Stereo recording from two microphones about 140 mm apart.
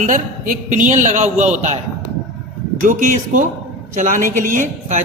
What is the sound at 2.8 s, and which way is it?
A man's voice, 65° right (ahead or behind).